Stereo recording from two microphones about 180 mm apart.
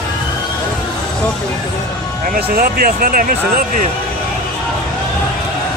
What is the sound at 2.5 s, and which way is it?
Speech, 55° right (ahead or behind).